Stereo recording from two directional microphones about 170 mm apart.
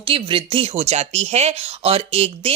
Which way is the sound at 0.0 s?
30° right (ahead or behind).